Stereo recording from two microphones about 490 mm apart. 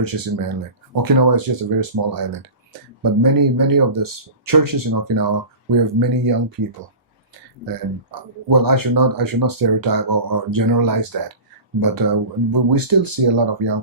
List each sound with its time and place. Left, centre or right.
0.0 s speech: right
8.1 s speech: right